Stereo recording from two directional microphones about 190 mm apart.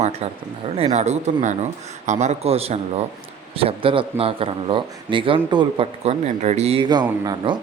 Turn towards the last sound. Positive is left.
turn(degrees=-25)  # may be behind; listen again after turning